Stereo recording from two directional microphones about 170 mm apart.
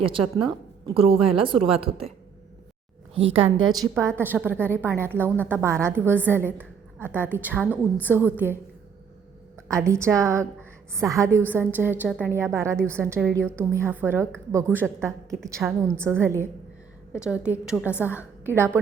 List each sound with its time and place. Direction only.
0.0 s a woman's voice: 30° right (ahead or behind)
3.2 s a woman's voice: 35° right (ahead or behind)
3.9 s a woman's voice: 15° right (ahead or behind)
7.6 s a woman's voice: 10° left (ahead or behind)
8.0 s a woman's voice: 10° right (ahead or behind)
9.6 s a woman's voice: 15° right (ahead or behind)